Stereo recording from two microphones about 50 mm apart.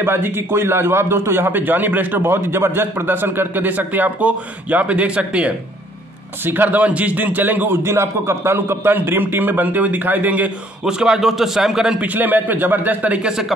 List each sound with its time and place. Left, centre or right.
0.0 s a man's voice: right
6.4 s a man's voice: right
6.8 s a man's voice: right
7.8 s a man's voice: right
8.9 s a man's voice: right
10.9 s a man's voice: centre
12.0 s a man's voice: right
13.2 s a man's voice: centre